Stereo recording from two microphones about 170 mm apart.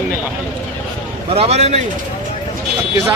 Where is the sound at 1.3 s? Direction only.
35° right (ahead or behind).